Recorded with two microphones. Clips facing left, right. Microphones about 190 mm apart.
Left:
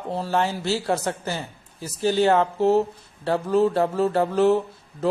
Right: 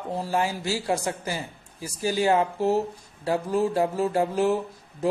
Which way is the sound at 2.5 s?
20° left (ahead or behind).